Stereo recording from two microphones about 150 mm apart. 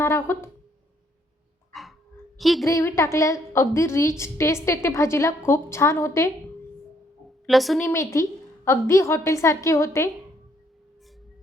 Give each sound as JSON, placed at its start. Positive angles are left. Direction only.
{"t": 0.0, "sound": "a woman's voice", "side_deg": 15}
{"t": 1.7, "sound": "dog", "side_deg": 0}
{"t": 2.4, "sound": "a woman's voice", "side_deg": 0}
{"t": 2.6, "sound": "a woman's voice", "side_deg": 20}
{"t": 7.4, "sound": "a woman's voice", "side_deg": 0}
{"t": 7.8, "sound": "a woman's voice", "side_deg": 15}